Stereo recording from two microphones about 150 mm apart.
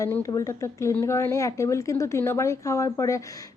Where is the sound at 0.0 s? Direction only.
20° left (ahead or behind).